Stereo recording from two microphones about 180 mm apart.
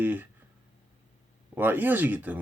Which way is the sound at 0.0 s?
10° right (ahead or behind).